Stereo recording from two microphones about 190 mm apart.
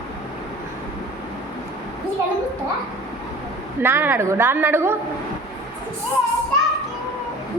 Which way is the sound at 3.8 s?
10° right (ahead or behind).